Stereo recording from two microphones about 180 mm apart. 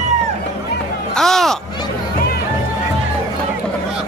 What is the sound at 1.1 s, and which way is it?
Speech, centre (ahead or behind).